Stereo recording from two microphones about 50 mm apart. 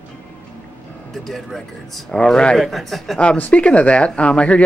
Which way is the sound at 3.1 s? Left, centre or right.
Left.